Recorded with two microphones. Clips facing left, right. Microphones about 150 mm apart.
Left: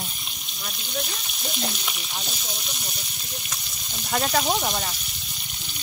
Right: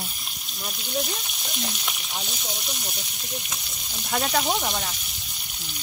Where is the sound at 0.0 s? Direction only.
Centre (ahead or behind).